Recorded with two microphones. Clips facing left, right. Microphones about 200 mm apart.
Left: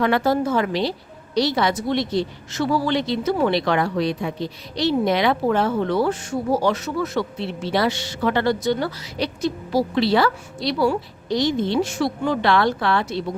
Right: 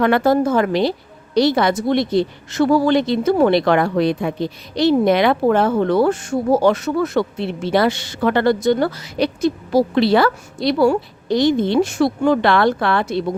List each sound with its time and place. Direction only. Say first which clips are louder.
0.0 s a woman's voice: right 4 dB; 55° right (ahead or behind)